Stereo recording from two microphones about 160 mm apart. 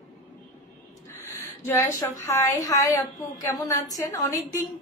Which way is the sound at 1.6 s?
15° left (ahead or behind).